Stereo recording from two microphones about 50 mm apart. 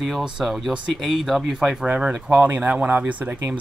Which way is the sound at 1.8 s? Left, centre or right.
Right.